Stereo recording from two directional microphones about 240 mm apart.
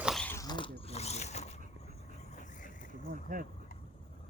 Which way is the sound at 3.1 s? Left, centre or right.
Right.